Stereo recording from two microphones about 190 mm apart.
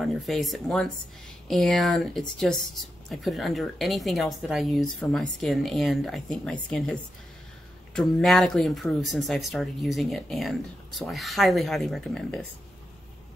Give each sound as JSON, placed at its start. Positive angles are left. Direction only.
{"t": 0.0, "sound": "speech", "side_deg": 0}